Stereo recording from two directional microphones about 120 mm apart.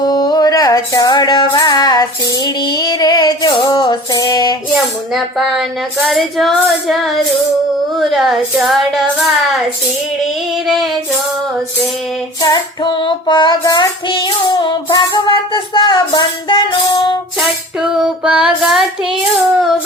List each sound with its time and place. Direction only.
0.0 s music: 35° left (ahead or behind)
5.1 s female singing: centre (ahead or behind)
12.5 s child singing: 40° left (ahead or behind)
14.6 s music: 40° left (ahead or behind)
17.4 s child singing: 5° right (ahead or behind)